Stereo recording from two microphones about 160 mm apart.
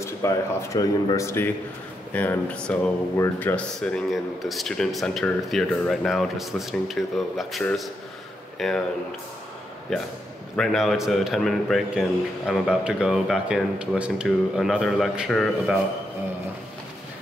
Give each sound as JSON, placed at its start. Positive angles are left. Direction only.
{"t": 0.0, "sound": "a man's voice", "side_deg": 20}
{"t": 9.9, "sound": "a man's voice", "side_deg": 0}